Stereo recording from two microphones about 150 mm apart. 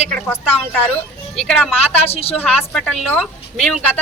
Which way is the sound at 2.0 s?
40° left (ahead or behind).